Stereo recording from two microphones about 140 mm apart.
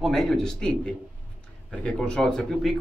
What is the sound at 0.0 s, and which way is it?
Speech, centre (ahead or behind).